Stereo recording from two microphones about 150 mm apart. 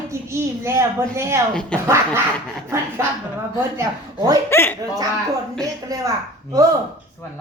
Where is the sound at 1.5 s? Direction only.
5° left (ahead or behind).